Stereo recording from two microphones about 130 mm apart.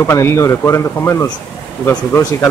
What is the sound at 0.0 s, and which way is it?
Speech, 20° left (ahead or behind).